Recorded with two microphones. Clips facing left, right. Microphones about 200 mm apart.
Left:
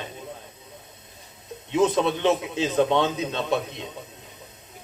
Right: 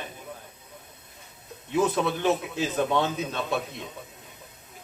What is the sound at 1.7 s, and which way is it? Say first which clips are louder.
A man's voice: left 3 dB; 20° left (ahead or behind).